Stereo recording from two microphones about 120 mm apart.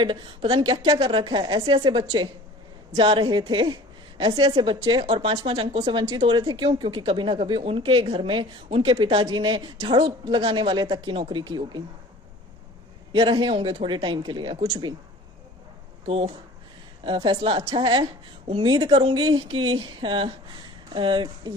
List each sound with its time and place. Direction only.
0.0 s a woman's voice: 45° right (ahead or behind)
2.9 s a woman's voice: 45° right (ahead or behind)
13.1 s speech: 40° right (ahead or behind)
16.0 s a woman's voice: 50° right (ahead or behind)